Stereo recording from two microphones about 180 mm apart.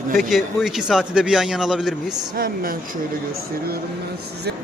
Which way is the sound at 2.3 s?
55° right (ahead or behind).